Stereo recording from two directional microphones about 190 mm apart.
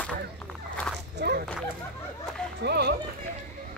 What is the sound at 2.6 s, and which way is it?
Run, 60° right (ahead or behind).